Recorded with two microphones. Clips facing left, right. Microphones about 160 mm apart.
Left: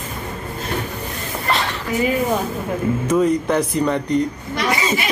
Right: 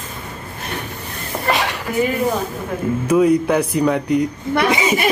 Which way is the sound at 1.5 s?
15° right (ahead or behind).